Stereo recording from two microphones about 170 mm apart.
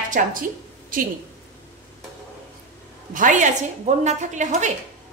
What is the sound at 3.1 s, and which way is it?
A woman's voice, 50° right (ahead or behind).